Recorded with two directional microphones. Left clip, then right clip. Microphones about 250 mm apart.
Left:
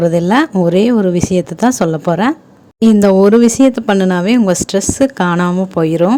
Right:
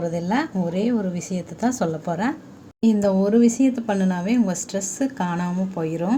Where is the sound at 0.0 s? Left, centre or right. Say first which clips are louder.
Left 12 dB; left.